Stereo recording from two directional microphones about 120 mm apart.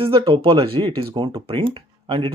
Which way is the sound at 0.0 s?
50° right (ahead or behind).